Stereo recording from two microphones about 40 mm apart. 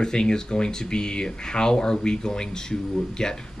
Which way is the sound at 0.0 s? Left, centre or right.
Centre.